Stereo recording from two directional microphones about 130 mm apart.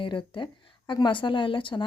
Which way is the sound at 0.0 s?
40° left (ahead or behind).